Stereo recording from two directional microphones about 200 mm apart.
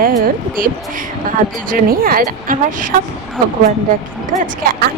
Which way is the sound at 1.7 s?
45° right (ahead or behind).